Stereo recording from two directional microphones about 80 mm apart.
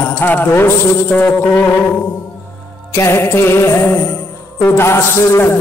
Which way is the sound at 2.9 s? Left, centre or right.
Left.